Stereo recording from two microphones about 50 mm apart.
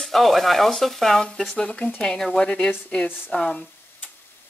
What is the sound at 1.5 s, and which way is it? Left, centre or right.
Speech, left.